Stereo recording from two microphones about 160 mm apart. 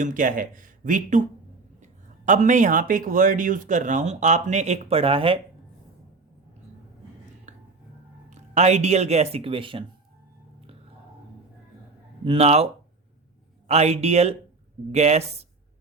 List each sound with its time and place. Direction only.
0.0 s speech: 55° right (ahead or behind); by 5.4 s 35° right (ahead or behind)
8.3 s speech: 45° right (ahead or behind)
12.2 s speech: 40° right (ahead or behind)
13.7 s speech: 45° right (ahead or behind)